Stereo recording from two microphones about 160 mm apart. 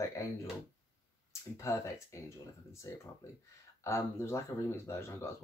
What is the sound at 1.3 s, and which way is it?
Speech, 20° left (ahead or behind).